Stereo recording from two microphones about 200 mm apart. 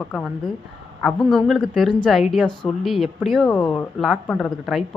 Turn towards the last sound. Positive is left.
turn(degrees=0)  # may be behind; listen again after turning